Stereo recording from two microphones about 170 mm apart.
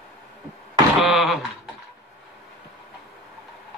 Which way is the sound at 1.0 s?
Centre (ahead or behind).